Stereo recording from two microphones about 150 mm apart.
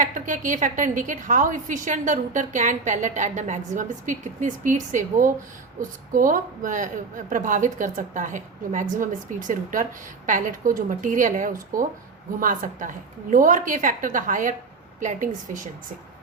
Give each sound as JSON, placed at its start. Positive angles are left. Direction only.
{"t": 0.0, "sound": "a woman's voice", "side_deg": -60}